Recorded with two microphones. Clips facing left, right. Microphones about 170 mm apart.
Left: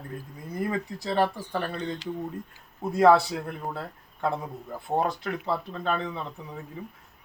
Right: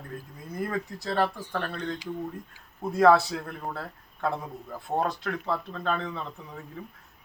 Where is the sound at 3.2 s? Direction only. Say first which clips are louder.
Left 2 dB; 20° left (ahead or behind).